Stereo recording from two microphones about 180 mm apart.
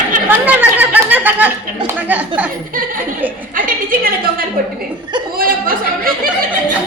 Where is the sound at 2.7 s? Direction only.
50° right (ahead or behind).